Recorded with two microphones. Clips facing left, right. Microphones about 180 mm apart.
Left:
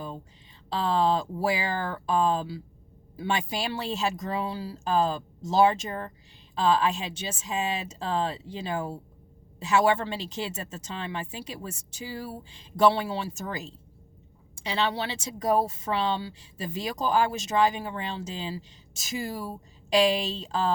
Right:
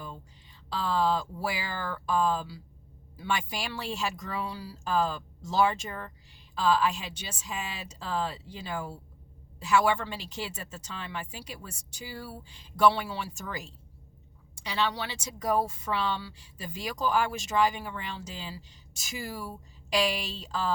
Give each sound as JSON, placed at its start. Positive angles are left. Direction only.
{"t": 0.7, "sound": "a woman's voice", "side_deg": 25}